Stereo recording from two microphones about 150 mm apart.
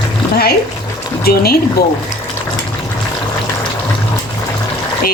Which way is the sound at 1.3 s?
90° left.